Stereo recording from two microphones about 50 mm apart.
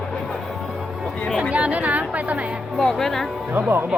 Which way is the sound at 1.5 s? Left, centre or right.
Right.